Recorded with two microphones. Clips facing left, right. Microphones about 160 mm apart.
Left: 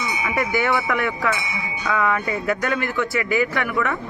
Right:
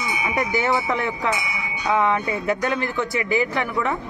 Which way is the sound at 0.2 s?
20° right (ahead or behind).